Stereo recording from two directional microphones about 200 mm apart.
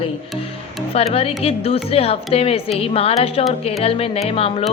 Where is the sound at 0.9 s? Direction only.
30° left (ahead or behind).